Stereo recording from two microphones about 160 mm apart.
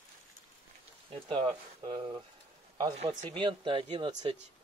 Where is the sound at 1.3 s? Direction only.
30° right (ahead or behind).